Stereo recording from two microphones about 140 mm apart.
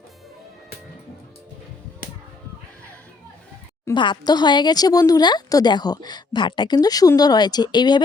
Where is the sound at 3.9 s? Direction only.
35° left (ahead or behind).